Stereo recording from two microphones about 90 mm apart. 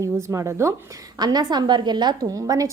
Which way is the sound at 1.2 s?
50° right (ahead or behind).